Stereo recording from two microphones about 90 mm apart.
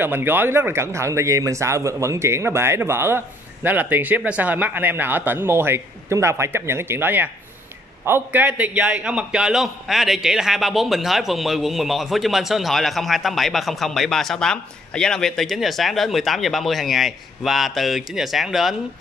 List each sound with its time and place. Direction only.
0.0 s a man's voice: 25° right (ahead or behind); by 18.8 s centre (ahead or behind)